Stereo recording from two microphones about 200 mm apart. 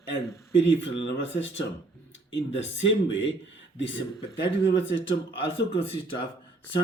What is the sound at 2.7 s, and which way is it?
Speech, 65° left (ahead or behind).